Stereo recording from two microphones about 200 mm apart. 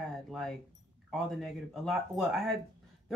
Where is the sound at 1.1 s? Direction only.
Centre (ahead or behind).